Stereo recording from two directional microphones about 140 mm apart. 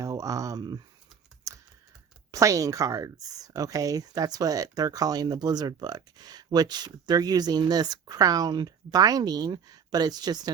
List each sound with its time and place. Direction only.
0.0 s a sound: 25° right (ahead or behind)
1.5 s computer keyboard: 20° right (ahead or behind)
2.3 s speech: 25° right (ahead or behind)